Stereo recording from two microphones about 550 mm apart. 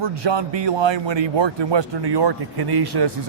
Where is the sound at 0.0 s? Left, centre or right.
Right.